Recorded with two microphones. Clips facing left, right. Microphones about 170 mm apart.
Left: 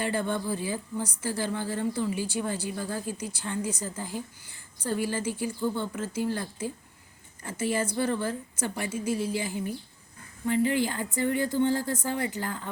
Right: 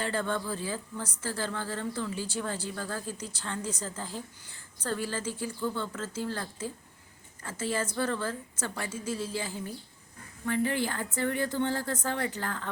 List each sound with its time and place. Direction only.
0.0 s a woman's voice: 15° left (ahead or behind)